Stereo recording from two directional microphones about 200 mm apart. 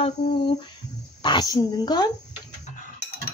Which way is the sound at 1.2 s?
20° left (ahead or behind).